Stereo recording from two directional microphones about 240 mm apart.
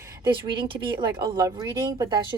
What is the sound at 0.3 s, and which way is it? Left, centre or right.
A woman's voice, right.